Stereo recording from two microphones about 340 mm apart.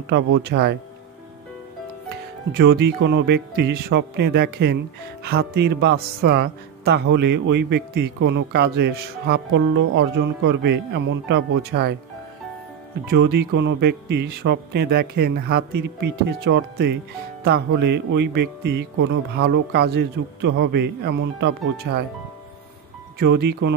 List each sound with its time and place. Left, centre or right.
0.0 s speech: right
2.5 s speech: right
13.0 s speech: right
23.1 s speech: right